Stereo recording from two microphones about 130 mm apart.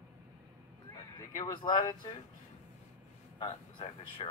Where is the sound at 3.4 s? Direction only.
40° left (ahead or behind).